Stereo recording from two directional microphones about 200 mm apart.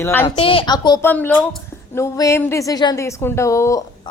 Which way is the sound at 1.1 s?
10° left (ahead or behind).